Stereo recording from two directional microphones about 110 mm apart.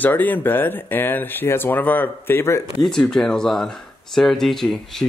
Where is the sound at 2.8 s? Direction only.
5° left (ahead or behind).